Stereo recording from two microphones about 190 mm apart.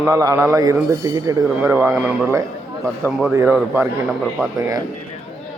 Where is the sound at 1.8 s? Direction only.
5° right (ahead or behind).